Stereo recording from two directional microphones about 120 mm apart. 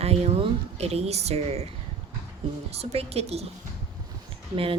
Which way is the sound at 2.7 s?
60° right (ahead or behind).